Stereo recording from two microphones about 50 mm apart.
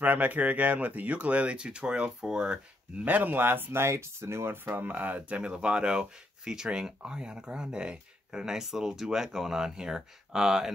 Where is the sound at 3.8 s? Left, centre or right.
Right.